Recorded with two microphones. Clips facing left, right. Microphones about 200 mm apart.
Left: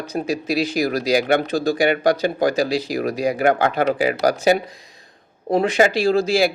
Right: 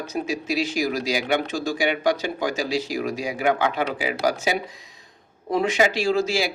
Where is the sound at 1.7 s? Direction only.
60° left (ahead or behind).